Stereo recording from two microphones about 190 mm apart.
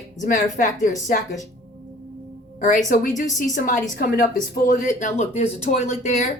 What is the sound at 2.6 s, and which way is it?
A woman's voice, 40° left (ahead or behind).